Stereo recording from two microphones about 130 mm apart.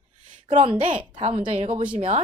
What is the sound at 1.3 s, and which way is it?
Speech, 45° right (ahead or behind).